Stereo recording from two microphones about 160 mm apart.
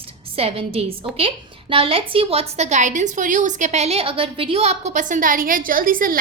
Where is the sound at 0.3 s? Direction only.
35° right (ahead or behind).